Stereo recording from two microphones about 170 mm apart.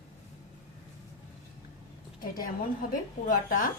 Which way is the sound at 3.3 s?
50° left (ahead or behind).